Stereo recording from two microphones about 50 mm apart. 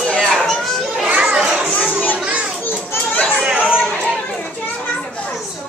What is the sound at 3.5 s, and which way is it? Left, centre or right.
Chatter, right.